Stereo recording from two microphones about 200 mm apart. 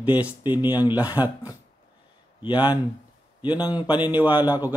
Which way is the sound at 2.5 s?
10° right (ahead or behind).